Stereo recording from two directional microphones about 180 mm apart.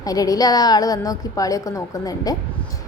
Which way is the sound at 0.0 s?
20° left (ahead or behind).